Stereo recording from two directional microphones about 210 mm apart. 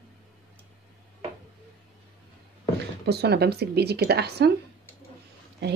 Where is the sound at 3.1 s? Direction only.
50° right (ahead or behind).